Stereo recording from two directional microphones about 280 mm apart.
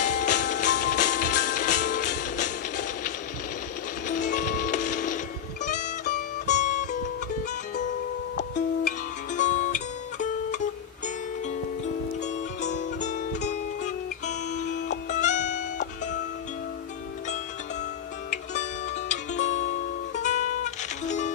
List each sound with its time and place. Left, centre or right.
0.0 s music: left
4.1 s music: left
8.5 s music: left
13.0 s music: left
18.3 s music: left